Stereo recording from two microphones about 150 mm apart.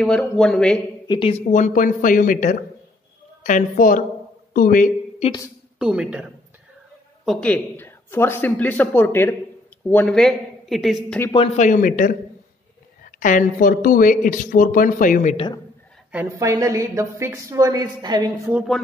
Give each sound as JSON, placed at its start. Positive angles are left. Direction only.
{"t": 0.0, "sound": "a man's voice", "side_deg": 5}
{"t": 1.0, "sound": "speech", "side_deg": 30}
{"t": 1.3, "sound": "a man's voice", "side_deg": 55}
{"t": 5.8, "sound": "speech", "side_deg": -5}
{"t": 7.2, "sound": "a man's voice", "side_deg": 5}
{"t": 11.3, "sound": "speech", "side_deg": 45}
{"t": 15.3, "sound": "a man's voice", "side_deg": 35}
{"t": 16.1, "sound": "a woman's voice", "side_deg": -10}
{"t": 16.3, "sound": "a woman's voice", "side_deg": -20}